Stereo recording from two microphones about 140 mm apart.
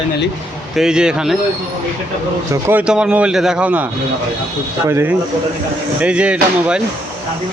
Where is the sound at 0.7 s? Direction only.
5° right (ahead or behind).